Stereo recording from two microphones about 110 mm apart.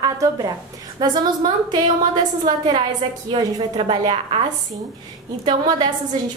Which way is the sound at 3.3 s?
45° right (ahead or behind).